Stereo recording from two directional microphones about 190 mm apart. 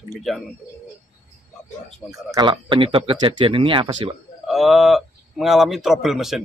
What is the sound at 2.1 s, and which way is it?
Speech, 20° right (ahead or behind).